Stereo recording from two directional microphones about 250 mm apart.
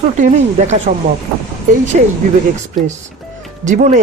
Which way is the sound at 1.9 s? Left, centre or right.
Right.